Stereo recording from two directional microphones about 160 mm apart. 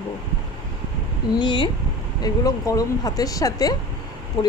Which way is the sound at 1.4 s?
30° left (ahead or behind).